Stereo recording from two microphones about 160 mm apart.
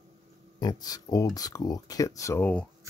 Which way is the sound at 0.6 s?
25° left (ahead or behind).